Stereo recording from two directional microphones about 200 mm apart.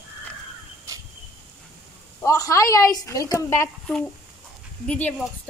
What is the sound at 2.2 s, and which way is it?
Speech, 15° left (ahead or behind).